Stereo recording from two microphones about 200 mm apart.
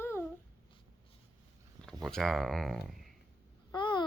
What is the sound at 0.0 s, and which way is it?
Babbling, 10° left (ahead or behind).